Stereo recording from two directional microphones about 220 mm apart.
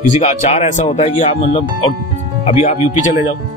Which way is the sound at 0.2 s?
30° left (ahead or behind).